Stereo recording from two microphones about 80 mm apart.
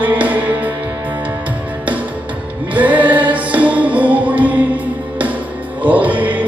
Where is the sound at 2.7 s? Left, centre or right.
Right.